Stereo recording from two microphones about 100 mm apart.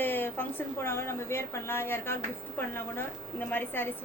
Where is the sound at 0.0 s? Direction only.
20° left (ahead or behind).